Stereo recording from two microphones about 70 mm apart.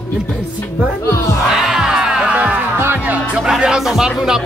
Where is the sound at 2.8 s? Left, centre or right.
Right.